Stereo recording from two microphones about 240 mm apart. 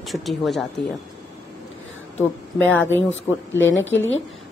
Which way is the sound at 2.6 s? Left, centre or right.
Centre.